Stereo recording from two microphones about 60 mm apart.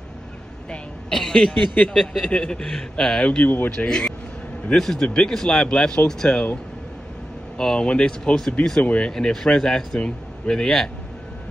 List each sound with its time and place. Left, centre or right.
0.7 s a woman's voice: centre
3.2 s speech: left
3.7 s a man's voice: centre
7.5 s a man's voice: centre